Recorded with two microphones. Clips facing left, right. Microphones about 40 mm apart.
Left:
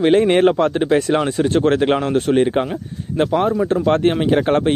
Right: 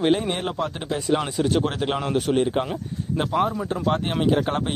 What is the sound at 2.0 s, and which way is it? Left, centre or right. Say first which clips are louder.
Speech: left 6 dB; centre.